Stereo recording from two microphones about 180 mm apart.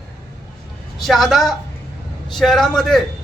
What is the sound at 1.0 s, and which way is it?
A man's voice, centre (ahead or behind).